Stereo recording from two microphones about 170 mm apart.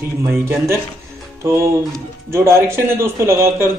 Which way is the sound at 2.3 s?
15° right (ahead or behind).